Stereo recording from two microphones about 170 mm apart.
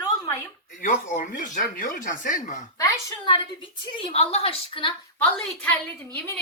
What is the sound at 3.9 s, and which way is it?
Speech, 35° left (ahead or behind).